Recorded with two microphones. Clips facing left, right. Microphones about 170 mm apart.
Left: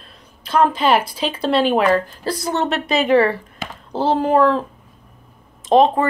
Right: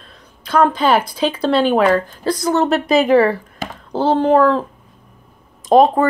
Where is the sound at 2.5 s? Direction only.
35° right (ahead or behind).